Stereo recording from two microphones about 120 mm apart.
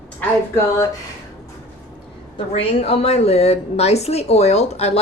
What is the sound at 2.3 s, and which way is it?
A woman's voice, 55° left (ahead or behind).